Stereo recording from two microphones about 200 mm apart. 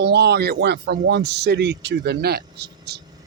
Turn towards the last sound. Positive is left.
turn(degrees=-55)  # may be behind; listen again after turning